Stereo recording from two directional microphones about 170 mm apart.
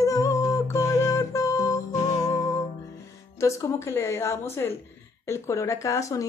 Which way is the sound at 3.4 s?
20° left (ahead or behind).